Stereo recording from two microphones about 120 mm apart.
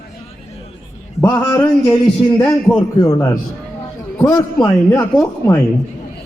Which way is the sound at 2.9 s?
30° left (ahead or behind).